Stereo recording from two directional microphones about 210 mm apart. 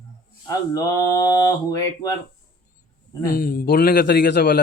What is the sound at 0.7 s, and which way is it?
Speech, 15° left (ahead or behind).